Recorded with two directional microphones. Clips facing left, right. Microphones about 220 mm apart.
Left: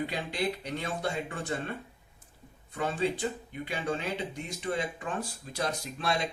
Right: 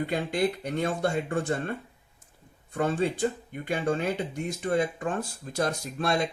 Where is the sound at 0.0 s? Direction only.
50° right (ahead or behind).